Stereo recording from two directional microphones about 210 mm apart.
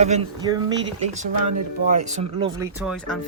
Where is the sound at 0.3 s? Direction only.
20° right (ahead or behind).